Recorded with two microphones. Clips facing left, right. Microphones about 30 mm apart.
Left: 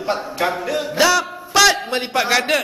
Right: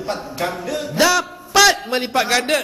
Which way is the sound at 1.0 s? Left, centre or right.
Centre.